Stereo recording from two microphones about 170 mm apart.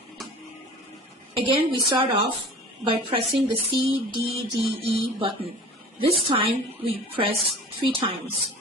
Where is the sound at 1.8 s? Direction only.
30° right (ahead or behind).